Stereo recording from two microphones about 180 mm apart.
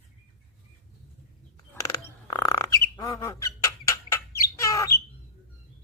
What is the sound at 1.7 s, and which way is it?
Squawk, 20° left (ahead or behind).